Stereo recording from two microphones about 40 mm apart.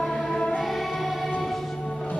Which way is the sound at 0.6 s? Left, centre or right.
Centre.